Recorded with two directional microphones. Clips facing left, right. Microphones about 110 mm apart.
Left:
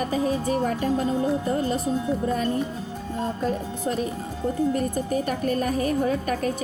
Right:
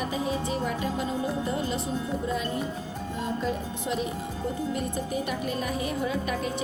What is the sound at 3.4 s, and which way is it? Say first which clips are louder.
A woman's voice: left 4 dB; 45° left (ahead or behind).